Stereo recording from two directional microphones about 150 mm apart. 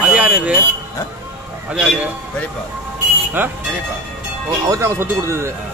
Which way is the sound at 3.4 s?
10° right (ahead or behind).